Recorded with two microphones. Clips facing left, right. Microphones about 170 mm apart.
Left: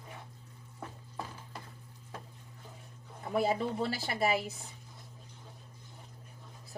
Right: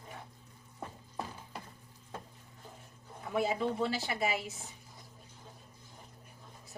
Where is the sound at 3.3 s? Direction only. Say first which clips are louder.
Left 1 dB; 35° left (ahead or behind).